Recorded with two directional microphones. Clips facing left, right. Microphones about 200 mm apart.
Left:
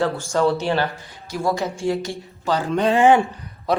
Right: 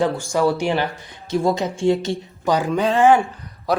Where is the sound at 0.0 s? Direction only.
15° right (ahead or behind).